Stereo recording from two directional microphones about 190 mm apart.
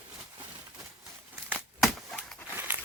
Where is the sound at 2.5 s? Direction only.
10° right (ahead or behind).